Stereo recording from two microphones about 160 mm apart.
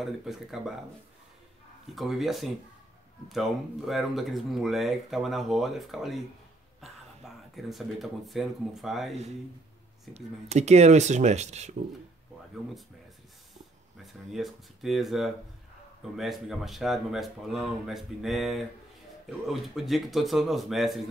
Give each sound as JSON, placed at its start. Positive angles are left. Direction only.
{"t": 0.0, "sound": "speech", "side_deg": 0}
{"t": 2.0, "sound": "speech", "side_deg": 0}
{"t": 7.5, "sound": "speech", "side_deg": 0}
{"t": 10.1, "sound": "speech", "side_deg": -45}
{"t": 14.3, "sound": "speech", "side_deg": 0}